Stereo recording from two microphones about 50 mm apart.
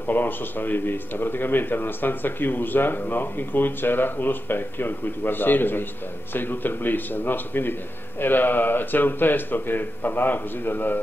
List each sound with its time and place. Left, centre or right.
0.0 s speech: left